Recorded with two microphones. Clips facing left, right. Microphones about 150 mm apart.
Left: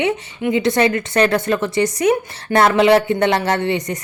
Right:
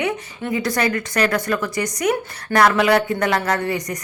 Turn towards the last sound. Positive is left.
turn(degrees=25)  # may be behind; listen again after turning